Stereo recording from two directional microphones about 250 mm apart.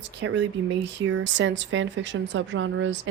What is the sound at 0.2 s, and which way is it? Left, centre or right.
Speech, right.